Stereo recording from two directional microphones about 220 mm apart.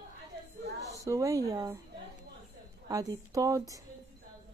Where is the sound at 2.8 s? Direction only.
15° right (ahead or behind).